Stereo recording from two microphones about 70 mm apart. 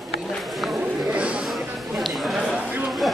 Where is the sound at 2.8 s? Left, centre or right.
Centre.